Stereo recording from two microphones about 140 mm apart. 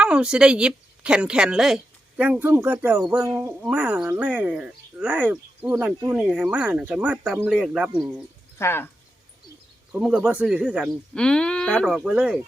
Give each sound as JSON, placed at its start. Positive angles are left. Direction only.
{"t": 0.0, "sound": "speech", "side_deg": -5}
{"t": 8.5, "sound": "speech", "side_deg": 15}
{"t": 10.0, "sound": "speech", "side_deg": -5}